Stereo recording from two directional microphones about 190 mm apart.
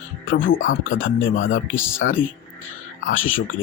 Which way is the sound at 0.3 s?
90° left.